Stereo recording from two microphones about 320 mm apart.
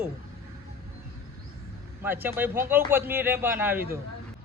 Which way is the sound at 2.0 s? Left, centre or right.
Centre.